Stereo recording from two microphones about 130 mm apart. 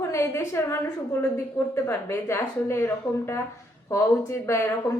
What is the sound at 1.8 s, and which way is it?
A woman's voice, 20° left (ahead or behind).